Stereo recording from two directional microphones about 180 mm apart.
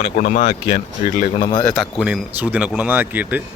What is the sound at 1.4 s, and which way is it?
Speech, 25° left (ahead or behind).